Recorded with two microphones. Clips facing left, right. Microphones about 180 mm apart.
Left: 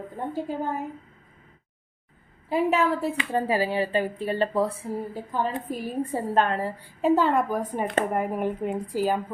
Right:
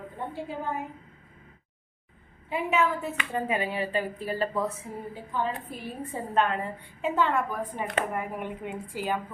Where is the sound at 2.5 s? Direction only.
35° left (ahead or behind).